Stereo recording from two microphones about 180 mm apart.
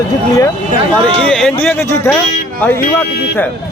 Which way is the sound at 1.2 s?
5° left (ahead or behind).